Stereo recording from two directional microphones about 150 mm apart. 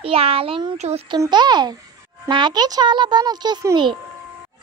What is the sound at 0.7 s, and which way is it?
Speech, 50° right (ahead or behind).